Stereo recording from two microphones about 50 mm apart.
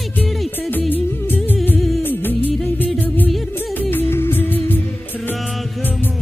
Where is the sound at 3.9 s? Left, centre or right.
Left.